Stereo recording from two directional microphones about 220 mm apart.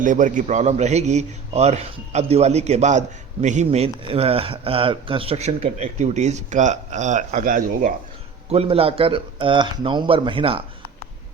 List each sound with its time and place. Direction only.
0.0 s a man's voice: 35° right (ahead or behind)
8.4 s a man's voice: 25° right (ahead or behind)